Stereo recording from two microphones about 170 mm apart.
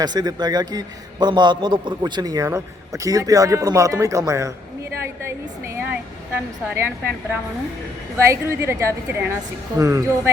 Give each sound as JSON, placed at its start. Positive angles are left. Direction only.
{"t": 0.0, "sound": "a man's voice", "side_deg": -25}
{"t": 5.7, "sound": "speech", "side_deg": -10}
{"t": 8.2, "sound": "a woman's voice", "side_deg": -15}